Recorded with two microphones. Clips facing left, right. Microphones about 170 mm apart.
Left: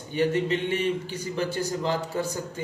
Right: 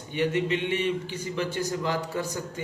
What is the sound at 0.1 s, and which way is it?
A man's voice, 35° left (ahead or behind).